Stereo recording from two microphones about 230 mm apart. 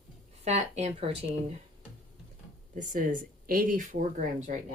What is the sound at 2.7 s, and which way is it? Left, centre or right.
Speech, right.